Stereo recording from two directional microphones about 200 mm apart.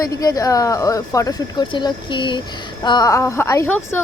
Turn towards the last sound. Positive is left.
turn(degrees=15)  # may be behind; listen again after turning